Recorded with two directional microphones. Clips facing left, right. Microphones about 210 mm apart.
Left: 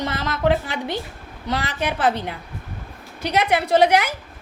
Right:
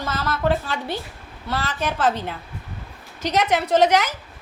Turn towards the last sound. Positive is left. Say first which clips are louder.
# left 1 dB
turn(degrees=10)  # may be behind; listen again after turning